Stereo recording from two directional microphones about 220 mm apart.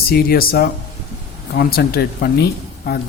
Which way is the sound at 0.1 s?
45° left (ahead or behind).